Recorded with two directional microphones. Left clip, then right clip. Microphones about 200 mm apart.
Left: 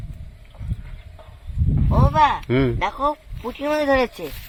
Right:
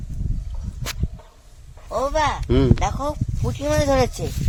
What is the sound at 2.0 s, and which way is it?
Speech, 55° right (ahead or behind).